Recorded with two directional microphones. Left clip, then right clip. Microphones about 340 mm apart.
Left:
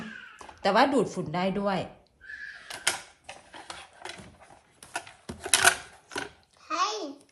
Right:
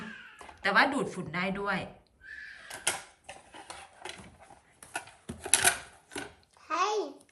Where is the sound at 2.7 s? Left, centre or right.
Centre.